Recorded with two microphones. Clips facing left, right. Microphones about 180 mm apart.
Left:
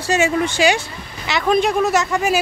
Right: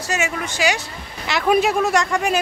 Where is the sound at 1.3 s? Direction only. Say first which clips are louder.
Even; 5° right (ahead or behind).